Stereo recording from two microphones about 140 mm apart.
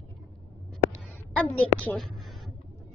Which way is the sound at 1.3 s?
10° left (ahead or behind).